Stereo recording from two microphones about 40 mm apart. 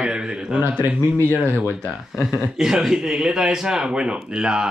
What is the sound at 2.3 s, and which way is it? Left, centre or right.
A man's voice, centre.